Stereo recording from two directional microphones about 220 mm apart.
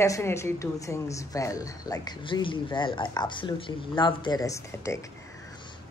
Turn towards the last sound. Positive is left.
turn(degrees=15)  # may be behind; listen again after turning